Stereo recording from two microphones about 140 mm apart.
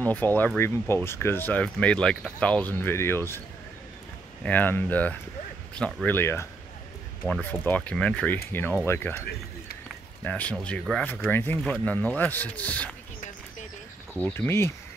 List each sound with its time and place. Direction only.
0.0 s speech: 10° left (ahead or behind)
6.1 s speech: 15° left (ahead or behind)
7.4 s speech: 15° left (ahead or behind)
10.2 s speech: 10° left (ahead or behind)
14.1 s speech: 10° left (ahead or behind)